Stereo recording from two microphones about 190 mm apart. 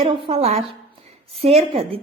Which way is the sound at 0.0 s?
30° right (ahead or behind).